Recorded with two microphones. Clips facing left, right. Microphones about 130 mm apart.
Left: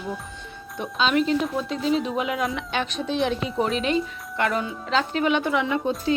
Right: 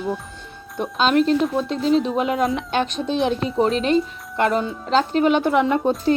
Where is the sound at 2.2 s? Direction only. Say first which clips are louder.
Right 5 dB; 35° right (ahead or behind).